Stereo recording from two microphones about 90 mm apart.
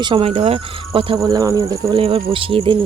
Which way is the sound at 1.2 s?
45° right (ahead or behind).